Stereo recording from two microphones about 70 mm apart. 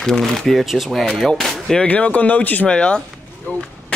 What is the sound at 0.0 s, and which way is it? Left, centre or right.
Speech, centre.